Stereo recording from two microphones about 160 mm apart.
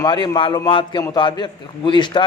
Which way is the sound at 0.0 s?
30° left (ahead or behind).